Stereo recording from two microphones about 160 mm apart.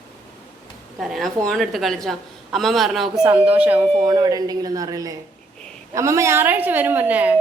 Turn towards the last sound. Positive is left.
turn(degrees=-10)  # may be behind; listen again after turning